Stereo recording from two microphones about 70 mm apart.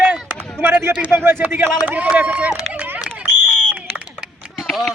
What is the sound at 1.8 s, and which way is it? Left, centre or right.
Speech, centre.